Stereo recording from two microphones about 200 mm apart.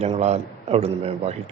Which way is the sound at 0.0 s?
35° right (ahead or behind).